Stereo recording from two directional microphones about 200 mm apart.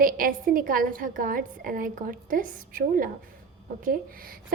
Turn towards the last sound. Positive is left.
turn(degrees=-45)  # may be behind; listen again after turning